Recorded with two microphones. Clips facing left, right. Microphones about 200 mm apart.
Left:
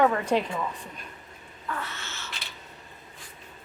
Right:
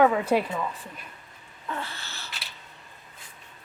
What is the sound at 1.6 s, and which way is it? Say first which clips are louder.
Owl: even; 30° right (ahead or behind).